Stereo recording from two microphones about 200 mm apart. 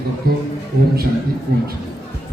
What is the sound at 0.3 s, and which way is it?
Speech, 45° right (ahead or behind).